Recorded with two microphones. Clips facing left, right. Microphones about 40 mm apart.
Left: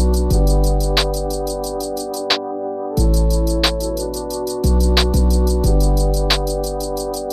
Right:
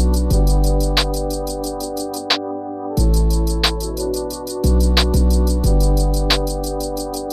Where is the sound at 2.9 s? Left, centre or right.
Left.